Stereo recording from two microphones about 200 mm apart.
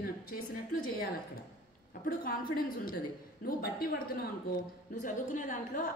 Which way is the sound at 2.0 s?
45° left (ahead or behind).